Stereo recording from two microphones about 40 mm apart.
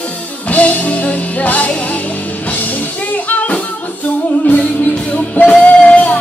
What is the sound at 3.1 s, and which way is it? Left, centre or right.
Music, left.